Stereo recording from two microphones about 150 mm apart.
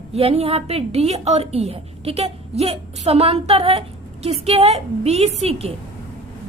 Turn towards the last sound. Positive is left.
turn(degrees=-45)  # may be behind; listen again after turning